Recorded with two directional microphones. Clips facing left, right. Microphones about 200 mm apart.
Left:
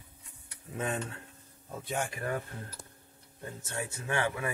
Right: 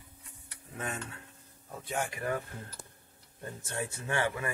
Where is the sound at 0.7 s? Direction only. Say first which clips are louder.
Left 5 dB; 25° left (ahead or behind).